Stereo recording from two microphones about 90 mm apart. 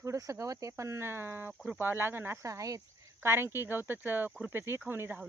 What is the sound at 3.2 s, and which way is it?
Speech, 25° right (ahead or behind).